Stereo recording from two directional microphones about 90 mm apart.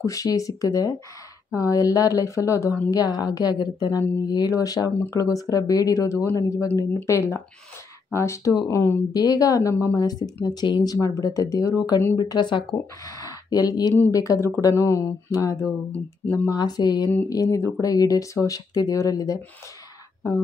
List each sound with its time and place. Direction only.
0.0 s a woman's voice: 40° left (ahead or behind)
9.1 s a woman's voice: 45° left (ahead or behind)
13.0 s a woman's voice: 40° left (ahead or behind)
17.3 s speech: 40° left (ahead or behind)